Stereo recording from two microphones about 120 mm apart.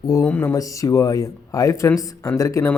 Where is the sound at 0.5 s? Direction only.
30° left (ahead or behind).